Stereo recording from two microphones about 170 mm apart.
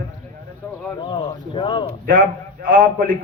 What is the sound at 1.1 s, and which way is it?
Speech, 25° left (ahead or behind).